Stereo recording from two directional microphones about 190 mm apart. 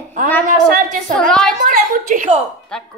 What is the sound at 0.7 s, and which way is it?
A woman's voice, 50° right (ahead or behind).